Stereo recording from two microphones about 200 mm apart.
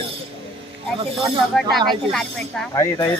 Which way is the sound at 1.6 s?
Centre (ahead or behind).